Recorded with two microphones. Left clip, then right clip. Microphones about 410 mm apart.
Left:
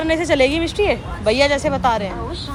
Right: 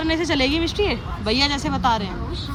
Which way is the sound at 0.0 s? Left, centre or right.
Centre.